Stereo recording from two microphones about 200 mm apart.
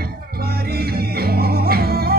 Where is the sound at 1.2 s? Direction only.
50° right (ahead or behind).